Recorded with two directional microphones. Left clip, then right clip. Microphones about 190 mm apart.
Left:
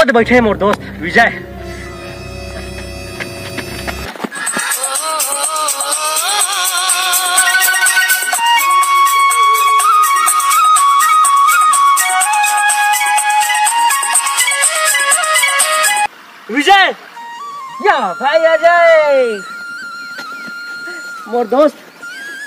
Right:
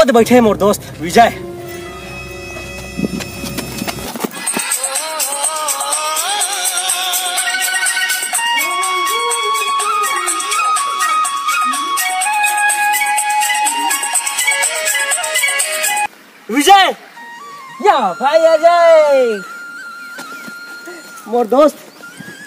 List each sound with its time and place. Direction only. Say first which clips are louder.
0.0 s speech: even; 20° right (ahead or behind)
3.2 s a sound: left 1 dB; 15° right (ahead or behind)
4.6 s music: left 3 dB; 25° left (ahead or behind)
6.3 s music: left 3 dB; 50° left (ahead or behind)
16.5 s a sound: right 1 dB; 10° right (ahead or behind)
17.8 s speech: right 1 dB; 15° right (ahead or behind)
21.3 s speech: right 1 dB; 15° right (ahead or behind)